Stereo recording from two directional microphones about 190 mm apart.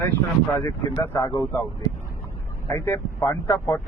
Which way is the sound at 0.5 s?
15° left (ahead or behind).